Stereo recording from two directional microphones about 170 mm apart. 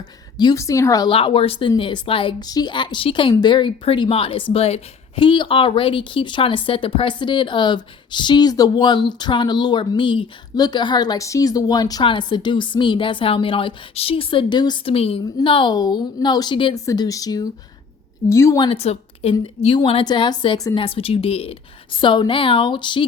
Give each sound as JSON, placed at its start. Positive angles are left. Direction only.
{"t": 0.3, "sound": "a woman's voice", "side_deg": 20}
{"t": 1.1, "sound": "a woman's voice", "side_deg": 30}
{"t": 18.7, "sound": "a woman's voice", "side_deg": 35}